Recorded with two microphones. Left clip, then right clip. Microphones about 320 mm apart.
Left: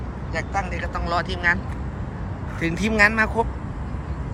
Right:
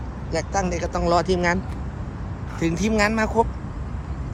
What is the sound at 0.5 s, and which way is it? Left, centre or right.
Speech, centre.